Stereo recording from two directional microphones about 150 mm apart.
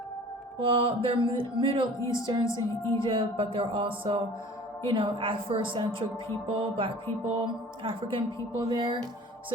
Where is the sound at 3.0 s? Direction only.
35° right (ahead or behind).